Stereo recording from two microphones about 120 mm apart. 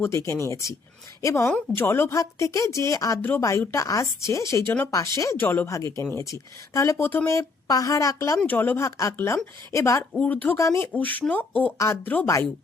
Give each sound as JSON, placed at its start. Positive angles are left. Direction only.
{"t": 0.0, "sound": "speech", "side_deg": 25}
{"t": 8.4, "sound": "speech", "side_deg": 15}
{"t": 10.1, "sound": "speech", "side_deg": 10}
{"t": 10.6, "sound": "speech", "side_deg": 25}
{"t": 10.9, "sound": "speech", "side_deg": 15}